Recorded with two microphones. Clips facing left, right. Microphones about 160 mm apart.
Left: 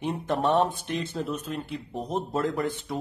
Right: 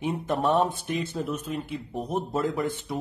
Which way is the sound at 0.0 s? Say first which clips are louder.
Even; 5° right (ahead or behind).